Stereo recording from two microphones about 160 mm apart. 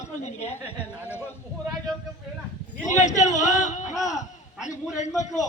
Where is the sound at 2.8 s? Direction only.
50° left (ahead or behind).